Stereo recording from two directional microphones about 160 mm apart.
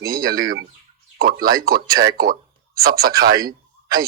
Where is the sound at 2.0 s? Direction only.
80° right.